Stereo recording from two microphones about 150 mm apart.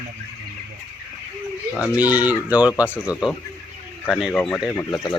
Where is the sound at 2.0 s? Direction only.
10° right (ahead or behind).